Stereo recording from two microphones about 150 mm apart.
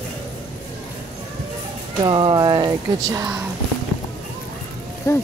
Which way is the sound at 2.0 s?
30° right (ahead or behind).